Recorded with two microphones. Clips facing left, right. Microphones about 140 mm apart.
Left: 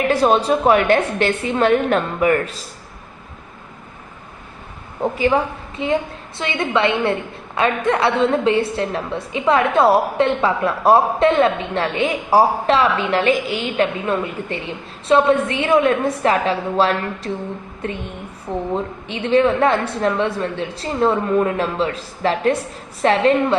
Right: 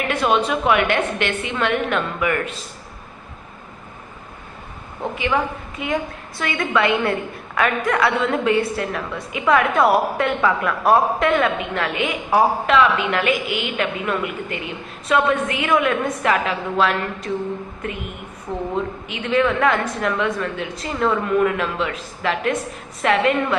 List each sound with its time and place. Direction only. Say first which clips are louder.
0.1 s a woman's voice: left 2 dB; 35° left (ahead or behind)
5.1 s a woman's voice: left 3 dB; 35° left (ahead or behind)
19.0 s a woman's voice: left 5 dB; 30° left (ahead or behind)